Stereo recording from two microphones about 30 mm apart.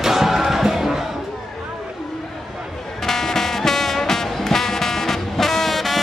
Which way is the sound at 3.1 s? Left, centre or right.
Centre.